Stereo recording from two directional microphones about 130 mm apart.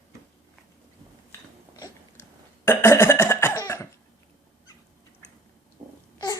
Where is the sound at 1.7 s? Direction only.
25° left (ahead or behind).